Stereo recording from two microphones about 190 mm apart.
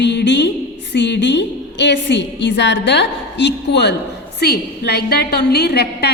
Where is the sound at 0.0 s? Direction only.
65° left (ahead or behind).